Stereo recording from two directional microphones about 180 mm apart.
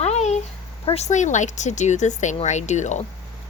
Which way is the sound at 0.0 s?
40° left (ahead or behind).